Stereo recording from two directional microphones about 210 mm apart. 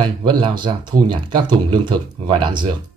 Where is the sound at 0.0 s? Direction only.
20° right (ahead or behind).